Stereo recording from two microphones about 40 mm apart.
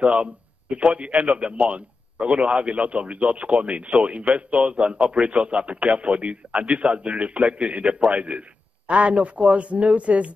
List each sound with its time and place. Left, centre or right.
0.0 s a man's voice: right